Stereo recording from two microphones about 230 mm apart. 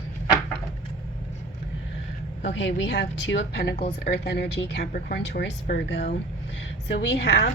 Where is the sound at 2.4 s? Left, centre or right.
Left.